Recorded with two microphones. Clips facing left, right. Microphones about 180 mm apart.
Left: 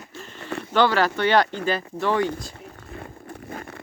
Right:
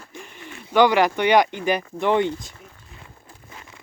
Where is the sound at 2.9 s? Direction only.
55° left (ahead or behind).